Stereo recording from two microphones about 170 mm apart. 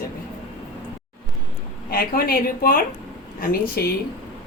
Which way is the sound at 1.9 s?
60° left (ahead or behind).